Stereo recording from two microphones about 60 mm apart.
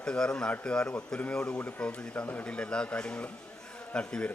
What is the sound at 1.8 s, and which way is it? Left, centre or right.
A man's voice, centre.